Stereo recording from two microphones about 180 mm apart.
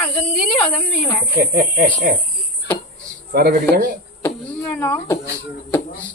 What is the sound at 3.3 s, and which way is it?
Speech, 60° right (ahead or behind).